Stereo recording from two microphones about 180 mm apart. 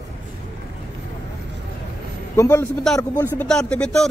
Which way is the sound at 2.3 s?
15° left (ahead or behind).